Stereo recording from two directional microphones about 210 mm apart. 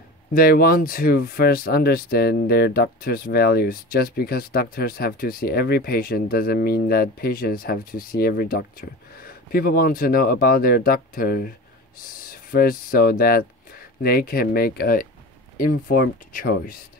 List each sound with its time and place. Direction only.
0.3 s speech: 45° left (ahead or behind)